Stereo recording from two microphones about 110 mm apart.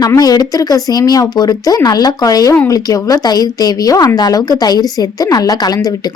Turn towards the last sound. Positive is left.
turn(degrees=35)  # may be behind; listen again after turning